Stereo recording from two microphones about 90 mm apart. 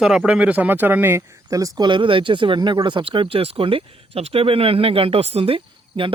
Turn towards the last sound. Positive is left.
turn(degrees=-85)